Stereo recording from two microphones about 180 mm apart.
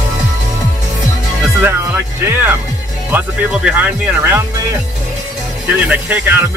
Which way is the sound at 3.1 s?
5° right (ahead or behind).